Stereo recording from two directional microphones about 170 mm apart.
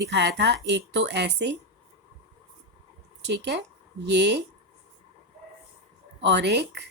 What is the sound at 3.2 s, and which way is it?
Speech, 90° right.